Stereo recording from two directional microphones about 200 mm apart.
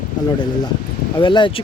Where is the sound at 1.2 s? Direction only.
25° left (ahead or behind).